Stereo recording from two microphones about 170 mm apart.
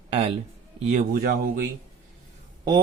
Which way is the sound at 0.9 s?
50° right (ahead or behind).